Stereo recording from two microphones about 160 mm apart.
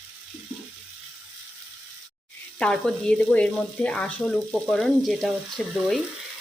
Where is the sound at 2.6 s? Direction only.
5° left (ahead or behind).